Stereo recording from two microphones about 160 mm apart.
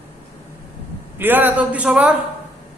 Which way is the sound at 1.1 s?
10° right (ahead or behind).